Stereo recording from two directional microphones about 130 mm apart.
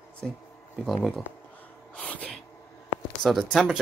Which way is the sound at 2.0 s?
10° left (ahead or behind).